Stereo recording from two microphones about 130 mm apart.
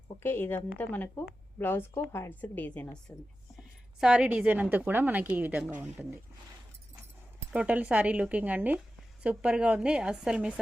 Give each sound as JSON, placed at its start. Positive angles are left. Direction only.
{"t": 0.2, "sound": "a woman's voice", "side_deg": 15}
{"t": 4.0, "sound": "a woman's voice", "side_deg": -10}
{"t": 7.5, "sound": "a woman's voice", "side_deg": -10}